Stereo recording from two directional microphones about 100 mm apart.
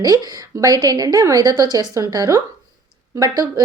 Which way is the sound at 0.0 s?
40° right (ahead or behind).